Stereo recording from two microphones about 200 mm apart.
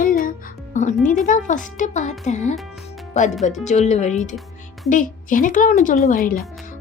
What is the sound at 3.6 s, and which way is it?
A woman's voice, 35° left (ahead or behind).